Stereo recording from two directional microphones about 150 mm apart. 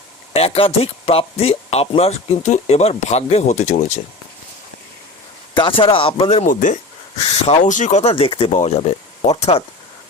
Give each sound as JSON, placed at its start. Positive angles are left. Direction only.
{"t": 0.3, "sound": "speech", "side_deg": 40}
{"t": 5.5, "sound": "speech", "side_deg": 35}
{"t": 6.5, "sound": "speech", "side_deg": 60}
{"t": 8.1, "sound": "speech", "side_deg": 35}
{"t": 8.5, "sound": "speech", "side_deg": 50}